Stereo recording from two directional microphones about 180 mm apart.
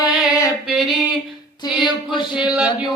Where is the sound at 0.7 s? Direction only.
Centre (ahead or behind).